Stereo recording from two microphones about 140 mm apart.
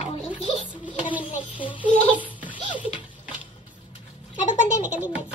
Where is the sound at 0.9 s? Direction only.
35° left (ahead or behind).